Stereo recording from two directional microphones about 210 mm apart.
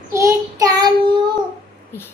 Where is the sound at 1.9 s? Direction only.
10° left (ahead or behind).